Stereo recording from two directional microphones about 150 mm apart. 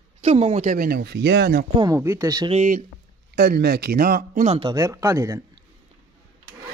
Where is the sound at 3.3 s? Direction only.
90° right; by 4.4 s 70° right (ahead or behind).